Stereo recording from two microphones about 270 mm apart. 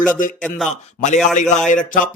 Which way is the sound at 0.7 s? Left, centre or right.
Left.